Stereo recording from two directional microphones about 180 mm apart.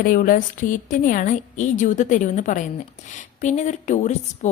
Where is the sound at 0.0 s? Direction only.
50° left (ahead or behind).